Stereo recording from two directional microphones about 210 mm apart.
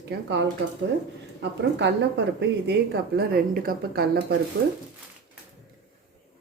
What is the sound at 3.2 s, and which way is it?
A woman's voice, 45° right (ahead or behind).